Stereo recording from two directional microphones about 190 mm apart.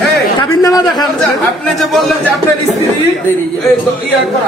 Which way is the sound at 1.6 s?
Centre (ahead or behind).